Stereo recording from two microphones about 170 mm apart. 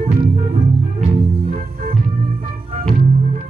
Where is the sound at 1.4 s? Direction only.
55° right (ahead or behind).